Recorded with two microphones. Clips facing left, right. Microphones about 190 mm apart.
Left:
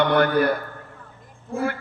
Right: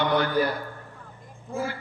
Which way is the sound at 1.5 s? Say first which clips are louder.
Left 5 dB; 60° left (ahead or behind).